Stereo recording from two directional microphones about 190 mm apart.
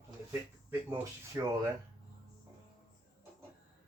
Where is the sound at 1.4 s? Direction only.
20° right (ahead or behind).